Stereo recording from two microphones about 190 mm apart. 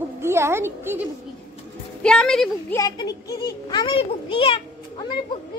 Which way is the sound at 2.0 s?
5° left (ahead or behind).